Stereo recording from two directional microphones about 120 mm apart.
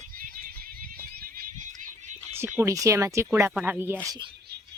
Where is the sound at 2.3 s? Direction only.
20° right (ahead or behind).